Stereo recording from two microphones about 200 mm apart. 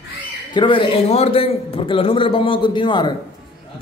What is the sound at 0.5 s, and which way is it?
A man's voice, 25° left (ahead or behind).